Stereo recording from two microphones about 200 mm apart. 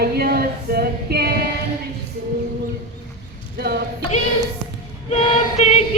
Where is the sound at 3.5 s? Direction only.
55° right (ahead or behind).